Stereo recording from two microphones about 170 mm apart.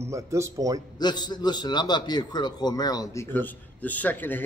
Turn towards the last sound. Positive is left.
turn(degrees=10)  # may be behind; listen again after turning